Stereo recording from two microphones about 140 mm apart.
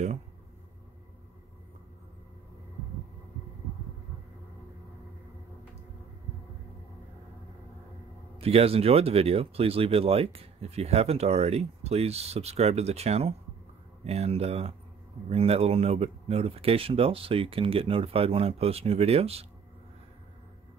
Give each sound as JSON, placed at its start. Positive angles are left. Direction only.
{"t": 8.4, "sound": "speech", "side_deg": -45}